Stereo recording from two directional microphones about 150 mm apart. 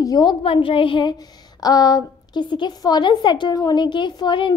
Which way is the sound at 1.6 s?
25° left (ahead or behind).